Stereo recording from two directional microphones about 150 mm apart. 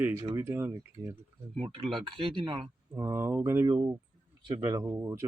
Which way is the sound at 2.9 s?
15° right (ahead or behind).